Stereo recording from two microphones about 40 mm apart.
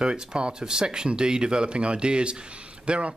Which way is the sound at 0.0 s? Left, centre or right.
Right.